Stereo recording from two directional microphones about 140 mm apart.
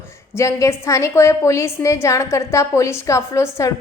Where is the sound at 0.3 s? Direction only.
20° left (ahead or behind).